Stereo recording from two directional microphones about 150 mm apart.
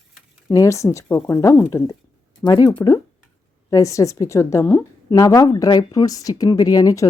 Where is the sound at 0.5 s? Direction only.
20° left (ahead or behind).